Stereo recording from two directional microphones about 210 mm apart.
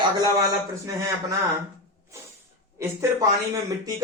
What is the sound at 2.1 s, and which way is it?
A man's voice, 15° right (ahead or behind).